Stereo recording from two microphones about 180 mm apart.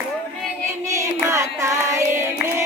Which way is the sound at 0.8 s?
15° right (ahead or behind).